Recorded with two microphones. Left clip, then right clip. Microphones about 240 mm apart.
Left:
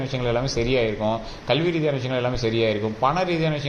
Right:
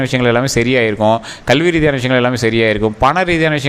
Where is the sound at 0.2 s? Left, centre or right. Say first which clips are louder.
Right 9 dB; right.